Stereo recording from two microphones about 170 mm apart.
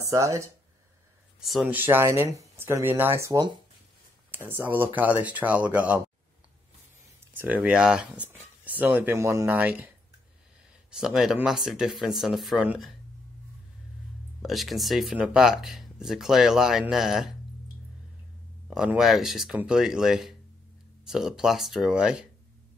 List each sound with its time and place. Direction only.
0.1 s speech: 20° right (ahead or behind)
1.4 s speech: 5° right (ahead or behind)
7.3 s speech: 10° right (ahead or behind)
10.9 s speech: 5° right (ahead or behind)
14.4 s speech: centre (ahead or behind)
18.7 s speech: centre (ahead or behind)